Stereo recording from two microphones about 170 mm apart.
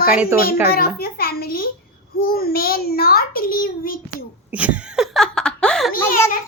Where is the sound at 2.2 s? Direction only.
60° left (ahead or behind).